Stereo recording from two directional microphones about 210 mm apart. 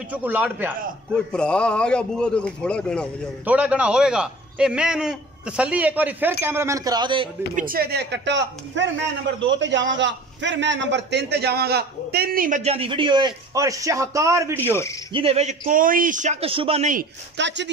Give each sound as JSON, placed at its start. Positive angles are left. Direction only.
{"t": 0.1, "sound": "speech", "side_deg": -10}
{"t": 1.1, "sound": "a man's voice", "side_deg": 5}
{"t": 3.4, "sound": "a man's voice", "side_deg": -5}
{"t": 7.5, "sound": "a man's voice", "side_deg": -45}
{"t": 15.1, "sound": "speech", "side_deg": -30}
{"t": 15.6, "sound": "speech", "side_deg": -40}
{"t": 17.4, "sound": "speech", "side_deg": -55}